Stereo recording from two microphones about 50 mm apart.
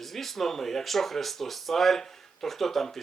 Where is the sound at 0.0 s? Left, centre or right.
Centre.